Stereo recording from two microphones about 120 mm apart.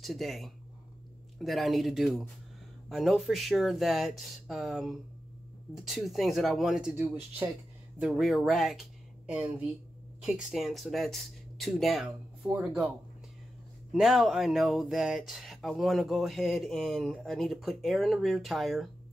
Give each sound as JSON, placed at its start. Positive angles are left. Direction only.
{"t": 0.0, "sound": "speech", "side_deg": 0}
{"t": 13.9, "sound": "speech", "side_deg": 0}